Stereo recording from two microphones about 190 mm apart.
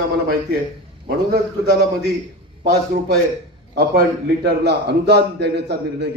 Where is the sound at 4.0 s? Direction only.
55° right (ahead or behind).